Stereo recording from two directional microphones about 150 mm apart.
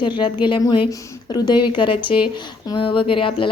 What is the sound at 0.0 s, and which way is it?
A woman's voice, 30° left (ahead or behind).